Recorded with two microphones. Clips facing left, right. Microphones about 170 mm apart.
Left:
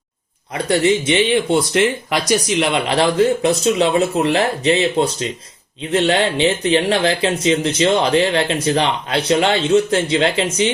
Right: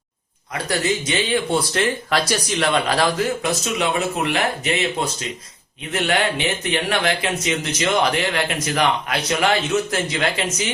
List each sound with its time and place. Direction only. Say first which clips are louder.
0.5 s speech: left 6 dB; 25° left (ahead or behind)